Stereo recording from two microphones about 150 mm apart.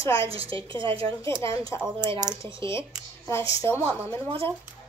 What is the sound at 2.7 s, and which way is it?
Speech, 20° left (ahead or behind).